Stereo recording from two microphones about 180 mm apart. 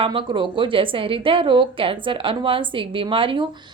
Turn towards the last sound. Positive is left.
turn(degrees=-25)  # may be behind; listen again after turning